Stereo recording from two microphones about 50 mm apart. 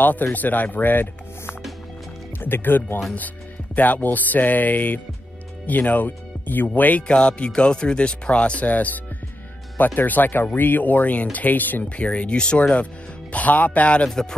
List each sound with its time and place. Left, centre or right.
0.0 s speech: left
3.7 s speech: left